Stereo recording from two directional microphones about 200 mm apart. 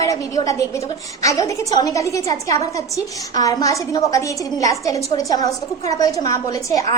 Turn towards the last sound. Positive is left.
turn(degrees=15)  # may be behind; listen again after turning